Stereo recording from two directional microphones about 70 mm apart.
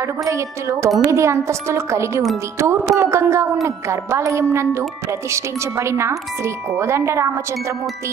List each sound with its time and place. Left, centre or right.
0.2 s a woman's voice: right